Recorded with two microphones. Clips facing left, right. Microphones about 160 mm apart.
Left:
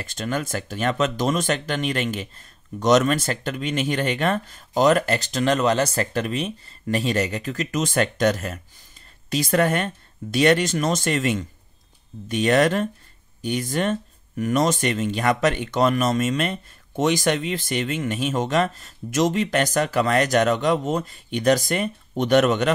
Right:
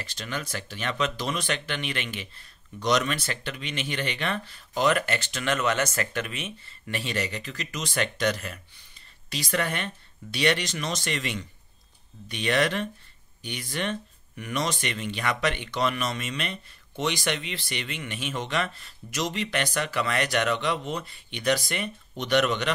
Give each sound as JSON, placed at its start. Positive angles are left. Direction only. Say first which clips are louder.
{"t": 0.0, "sound": "speech", "louder": "left 8 dB", "side_deg": 45}